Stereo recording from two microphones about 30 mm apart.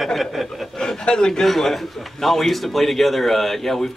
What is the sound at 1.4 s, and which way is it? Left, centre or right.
A man's voice, centre.